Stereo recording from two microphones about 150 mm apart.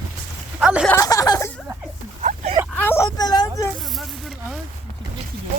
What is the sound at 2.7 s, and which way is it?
Speech, 15° left (ahead or behind).